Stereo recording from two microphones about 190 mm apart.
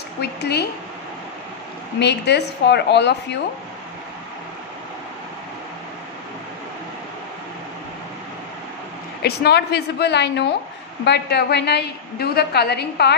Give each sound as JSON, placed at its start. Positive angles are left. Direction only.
{"t": 0.2, "sound": "a woman's voice", "side_deg": 60}
{"t": 2.0, "sound": "a woman's voice", "side_deg": 65}
{"t": 9.2, "sound": "a woman's voice", "side_deg": 60}